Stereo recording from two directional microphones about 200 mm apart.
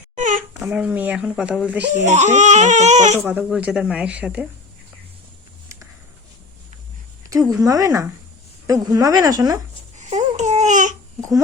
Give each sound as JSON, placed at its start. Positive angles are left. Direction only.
{"t": 0.2, "sound": "babbling", "side_deg": -40}
{"t": 0.6, "sound": "speech", "side_deg": -5}
{"t": 1.9, "sound": "speech", "side_deg": -35}
{"t": 3.2, "sound": "speech", "side_deg": -5}
{"t": 7.5, "sound": "speech", "side_deg": -15}
{"t": 10.0, "sound": "babbling", "side_deg": -35}